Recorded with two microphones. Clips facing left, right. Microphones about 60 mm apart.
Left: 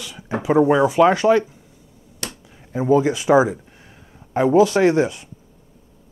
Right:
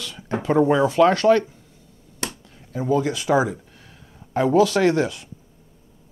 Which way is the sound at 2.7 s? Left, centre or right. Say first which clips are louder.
Left 5 dB; left.